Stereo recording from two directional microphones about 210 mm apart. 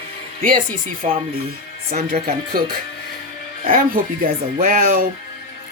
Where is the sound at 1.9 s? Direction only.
45° right (ahead or behind).